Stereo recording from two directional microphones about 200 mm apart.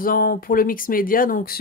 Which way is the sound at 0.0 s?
45° left (ahead or behind).